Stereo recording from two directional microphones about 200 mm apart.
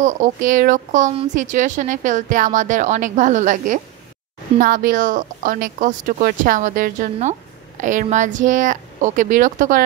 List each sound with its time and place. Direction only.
0.0 s speech: 40° right (ahead or behind)